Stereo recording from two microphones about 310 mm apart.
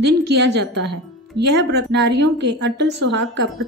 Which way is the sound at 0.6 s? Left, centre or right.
Right.